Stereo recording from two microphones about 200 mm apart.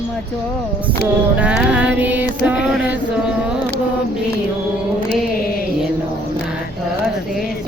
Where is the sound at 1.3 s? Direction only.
5° right (ahead or behind).